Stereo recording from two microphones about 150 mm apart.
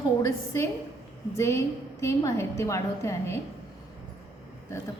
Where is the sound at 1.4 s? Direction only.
20° left (ahead or behind).